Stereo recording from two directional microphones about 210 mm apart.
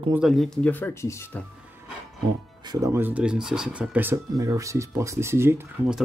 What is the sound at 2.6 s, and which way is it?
Speech, 15° right (ahead or behind).